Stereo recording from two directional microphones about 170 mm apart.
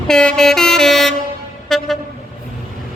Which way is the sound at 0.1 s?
5° left (ahead or behind).